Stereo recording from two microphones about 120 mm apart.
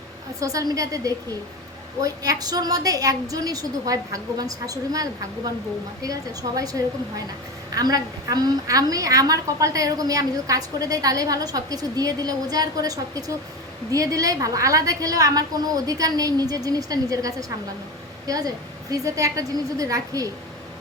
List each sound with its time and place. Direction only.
0.3 s a woman's voice: 30° right (ahead or behind)
6.6 s a woman's voice: 30° right (ahead or behind)